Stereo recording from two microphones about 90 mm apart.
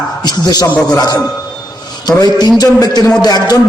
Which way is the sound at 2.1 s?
50° left (ahead or behind).